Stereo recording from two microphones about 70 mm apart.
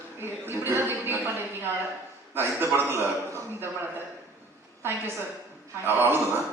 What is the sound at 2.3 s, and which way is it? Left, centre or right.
Speech, right.